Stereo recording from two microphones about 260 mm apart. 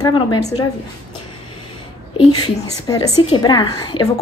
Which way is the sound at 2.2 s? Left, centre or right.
Centre.